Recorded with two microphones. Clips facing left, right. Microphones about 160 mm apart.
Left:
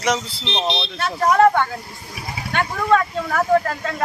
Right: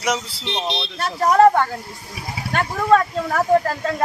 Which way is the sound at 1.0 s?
35° right (ahead or behind).